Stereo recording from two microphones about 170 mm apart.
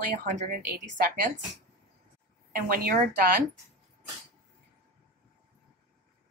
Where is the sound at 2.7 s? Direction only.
60° right (ahead or behind).